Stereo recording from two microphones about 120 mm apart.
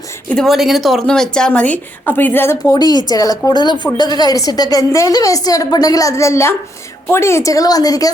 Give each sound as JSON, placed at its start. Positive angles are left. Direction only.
{"t": 0.3, "sound": "a woman's voice", "side_deg": 5}
{"t": 2.6, "sound": "a woman's voice", "side_deg": 35}